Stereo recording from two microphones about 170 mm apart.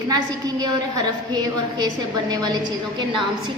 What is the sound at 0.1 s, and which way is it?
A woman's voice, 20° right (ahead or behind).